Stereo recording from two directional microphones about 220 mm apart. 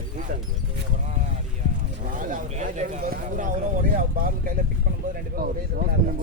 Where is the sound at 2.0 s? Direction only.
35° right (ahead or behind).